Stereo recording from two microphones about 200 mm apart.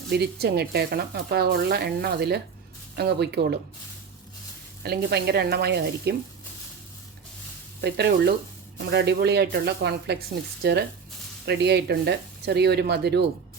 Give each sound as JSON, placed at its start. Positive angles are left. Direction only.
{"t": 0.1, "sound": "speech", "side_deg": -55}
{"t": 4.8, "sound": "speech", "side_deg": -50}
{"t": 7.8, "sound": "speech", "side_deg": -55}